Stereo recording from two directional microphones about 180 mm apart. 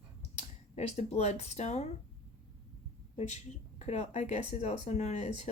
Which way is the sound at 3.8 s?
40° left (ahead or behind).